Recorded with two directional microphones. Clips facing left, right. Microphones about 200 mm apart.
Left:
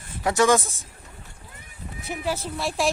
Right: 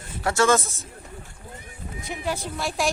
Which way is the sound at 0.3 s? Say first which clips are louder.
Left 1 dB; 15° left (ahead or behind).